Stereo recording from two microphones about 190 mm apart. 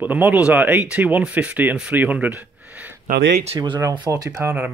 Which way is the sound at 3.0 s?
60° right (ahead or behind).